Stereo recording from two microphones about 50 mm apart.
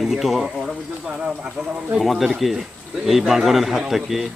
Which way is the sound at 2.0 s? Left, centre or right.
Centre.